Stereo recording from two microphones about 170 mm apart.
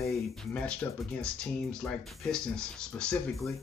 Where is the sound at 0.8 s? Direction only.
10° left (ahead or behind).